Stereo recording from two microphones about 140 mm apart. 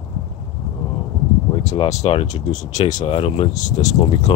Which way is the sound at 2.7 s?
30° left (ahead or behind).